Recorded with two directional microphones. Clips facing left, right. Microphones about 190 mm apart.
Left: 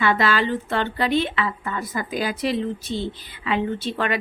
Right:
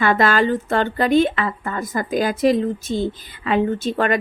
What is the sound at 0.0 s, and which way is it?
A woman's voice, 50° right (ahead or behind).